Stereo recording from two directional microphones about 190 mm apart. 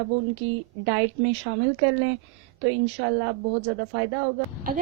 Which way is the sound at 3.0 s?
65° right (ahead or behind).